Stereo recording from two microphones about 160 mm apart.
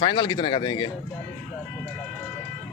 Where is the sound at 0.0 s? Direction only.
30° left (ahead or behind).